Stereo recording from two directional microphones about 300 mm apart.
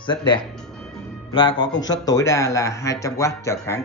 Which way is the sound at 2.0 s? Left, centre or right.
Centre.